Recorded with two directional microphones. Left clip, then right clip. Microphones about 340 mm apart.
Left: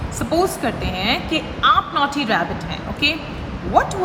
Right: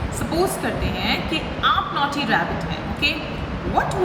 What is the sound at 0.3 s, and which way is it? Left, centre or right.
A woman's voice, centre.